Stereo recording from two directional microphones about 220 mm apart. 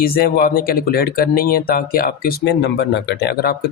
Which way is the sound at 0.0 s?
45° left (ahead or behind).